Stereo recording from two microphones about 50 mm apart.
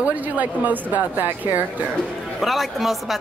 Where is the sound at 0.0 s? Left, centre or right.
Right.